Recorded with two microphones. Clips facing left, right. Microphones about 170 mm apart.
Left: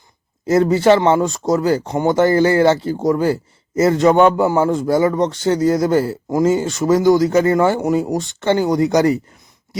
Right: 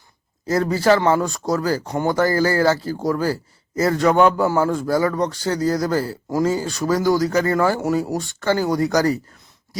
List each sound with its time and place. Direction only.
0.4 s speech: 25° left (ahead or behind)